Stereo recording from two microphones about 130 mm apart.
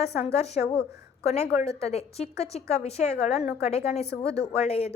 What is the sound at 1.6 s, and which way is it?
A woman's voice, 50° left (ahead or behind).